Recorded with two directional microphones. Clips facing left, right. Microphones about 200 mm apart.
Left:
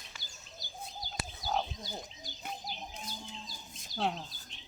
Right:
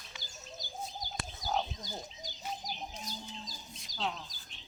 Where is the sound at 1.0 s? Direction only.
45° right (ahead or behind).